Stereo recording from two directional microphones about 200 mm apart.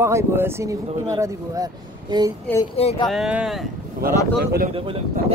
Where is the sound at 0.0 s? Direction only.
15° right (ahead or behind).